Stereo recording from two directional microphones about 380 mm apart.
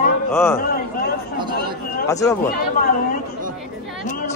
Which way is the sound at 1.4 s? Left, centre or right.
Centre.